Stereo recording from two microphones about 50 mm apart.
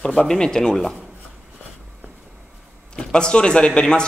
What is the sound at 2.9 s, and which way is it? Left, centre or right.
Speech, centre.